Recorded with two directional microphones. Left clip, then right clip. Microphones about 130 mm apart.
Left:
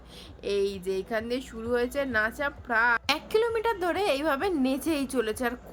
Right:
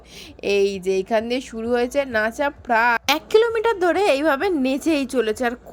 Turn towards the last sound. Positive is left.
turn(degrees=-45)  # may be behind; listen again after turning